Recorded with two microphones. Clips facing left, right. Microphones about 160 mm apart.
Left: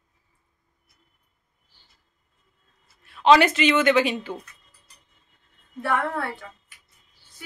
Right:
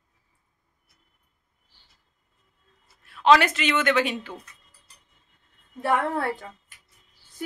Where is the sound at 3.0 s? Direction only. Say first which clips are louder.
Left 2 dB; centre (ahead or behind).